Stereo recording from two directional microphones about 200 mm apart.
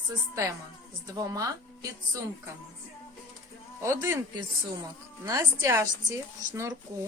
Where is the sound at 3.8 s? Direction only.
15° right (ahead or behind).